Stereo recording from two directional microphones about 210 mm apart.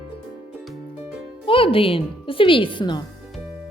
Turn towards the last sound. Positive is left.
turn(degrees=20)  # may be behind; listen again after turning